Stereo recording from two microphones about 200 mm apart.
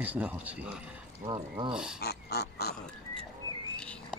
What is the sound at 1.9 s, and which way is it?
Pig, 55° left (ahead or behind).